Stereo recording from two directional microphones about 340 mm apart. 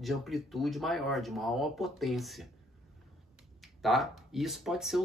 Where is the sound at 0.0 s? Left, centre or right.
Centre.